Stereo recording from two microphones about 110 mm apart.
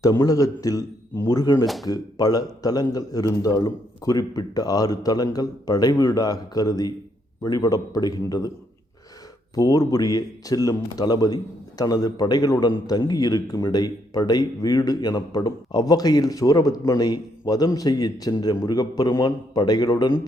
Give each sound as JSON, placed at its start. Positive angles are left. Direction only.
{"t": 0.0, "sound": "a man's voice", "side_deg": 30}
{"t": 1.6, "sound": "speech", "side_deg": 0}
{"t": 1.9, "sound": "a man's voice", "side_deg": 35}
{"t": 9.6, "sound": "a man's voice", "side_deg": 35}